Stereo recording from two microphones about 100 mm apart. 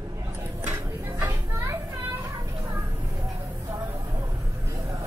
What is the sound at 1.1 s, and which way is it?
Children playing, 30° right (ahead or behind).